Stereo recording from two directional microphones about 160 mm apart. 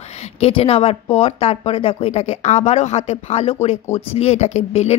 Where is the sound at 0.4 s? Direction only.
35° left (ahead or behind).